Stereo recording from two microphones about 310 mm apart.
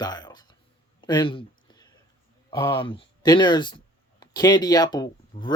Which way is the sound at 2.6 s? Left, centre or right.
Centre.